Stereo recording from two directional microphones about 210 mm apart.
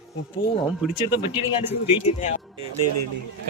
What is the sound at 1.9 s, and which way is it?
Speech, 30° left (ahead or behind).